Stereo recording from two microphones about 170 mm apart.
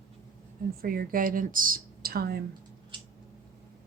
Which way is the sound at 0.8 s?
60° right (ahead or behind).